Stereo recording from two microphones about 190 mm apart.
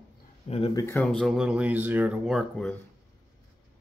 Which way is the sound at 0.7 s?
15° left (ahead or behind).